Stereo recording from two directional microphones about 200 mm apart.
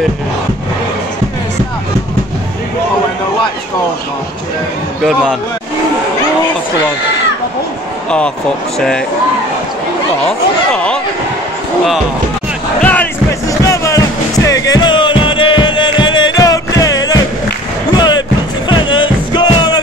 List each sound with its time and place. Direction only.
5.0 s speech: 5° left (ahead or behind)
8.7 s speech: 5° left (ahead or behind)
10.7 s a sound: 5° left (ahead or behind)
12.8 s music: 5° left (ahead or behind)